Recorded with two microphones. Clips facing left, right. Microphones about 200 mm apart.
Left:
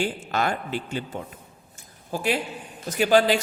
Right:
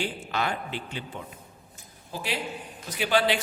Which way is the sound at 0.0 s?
45° left (ahead or behind).